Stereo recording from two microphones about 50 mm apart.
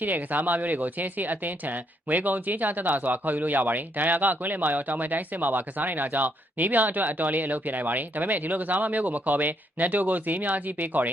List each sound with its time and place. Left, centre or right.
0.0 s speech: right